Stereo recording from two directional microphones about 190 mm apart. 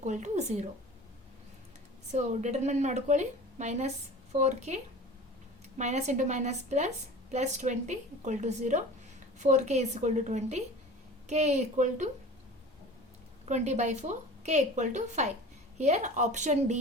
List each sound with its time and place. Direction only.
0.0 s a woman's voice: 40° right (ahead or behind)
2.1 s a woman's voice: 35° right (ahead or behind)
13.4 s a woman's voice: 35° right (ahead or behind)